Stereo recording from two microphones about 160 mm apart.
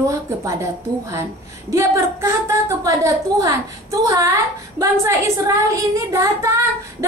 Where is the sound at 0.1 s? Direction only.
20° right (ahead or behind).